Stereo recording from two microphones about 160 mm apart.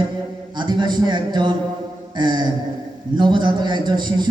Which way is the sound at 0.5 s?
30° right (ahead or behind).